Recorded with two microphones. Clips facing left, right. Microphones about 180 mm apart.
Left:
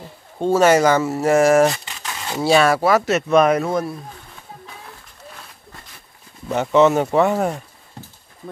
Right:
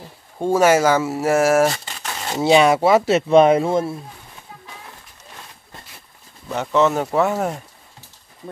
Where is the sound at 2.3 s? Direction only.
20° right (ahead or behind).